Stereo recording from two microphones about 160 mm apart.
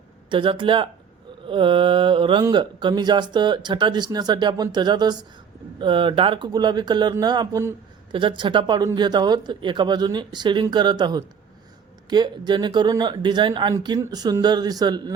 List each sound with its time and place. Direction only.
0.3 s mantra: 30° right (ahead or behind)
2.4 s speech: 30° right (ahead or behind)